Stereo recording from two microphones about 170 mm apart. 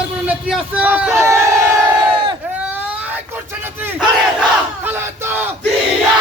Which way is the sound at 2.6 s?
10° right (ahead or behind).